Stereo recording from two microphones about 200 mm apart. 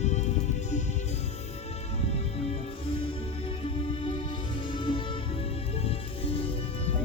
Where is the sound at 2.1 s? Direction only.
30° left (ahead or behind).